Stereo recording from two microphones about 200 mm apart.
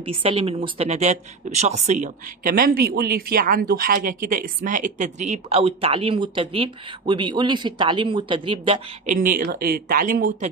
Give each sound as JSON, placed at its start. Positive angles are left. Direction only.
{"t": 0.0, "sound": "speech", "side_deg": -25}
{"t": 9.0, "sound": "speech", "side_deg": -45}